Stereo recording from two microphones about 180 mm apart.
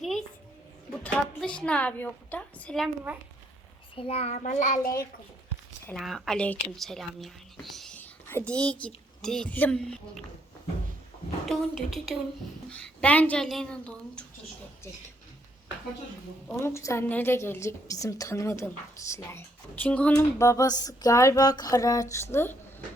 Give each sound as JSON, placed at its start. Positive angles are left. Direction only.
{"t": 1.0, "sound": "a woman's voice", "side_deg": 5}
{"t": 3.9, "sound": "child singing", "side_deg": 30}
{"t": 5.9, "sound": "a woman's voice", "side_deg": 0}
{"t": 11.4, "sound": "a woman's voice", "side_deg": 0}
{"t": 16.5, "sound": "a woman's voice", "side_deg": 15}
{"t": 20.1, "sound": "a sound", "side_deg": 15}
{"t": 22.1, "sound": "a woman's voice", "side_deg": 15}